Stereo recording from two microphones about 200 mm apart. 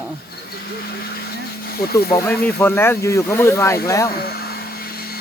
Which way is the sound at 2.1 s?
15° left (ahead or behind).